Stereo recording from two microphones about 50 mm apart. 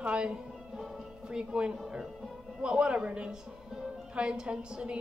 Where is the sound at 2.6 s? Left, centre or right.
Centre.